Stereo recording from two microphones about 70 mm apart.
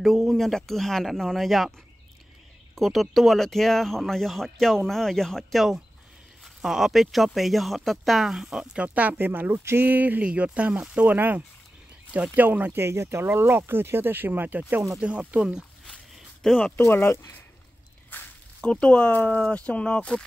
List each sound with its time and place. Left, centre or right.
0.0 s speech: centre
2.7 s speech: centre
8.7 s speech: right
11.1 s speech: right
15.0 s speech: centre
16.4 s speech: centre
16.7 s speech: left
18.1 s a sound: left
18.6 s speech: centre